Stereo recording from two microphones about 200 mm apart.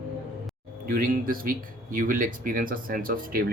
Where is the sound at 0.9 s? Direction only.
45° right (ahead or behind).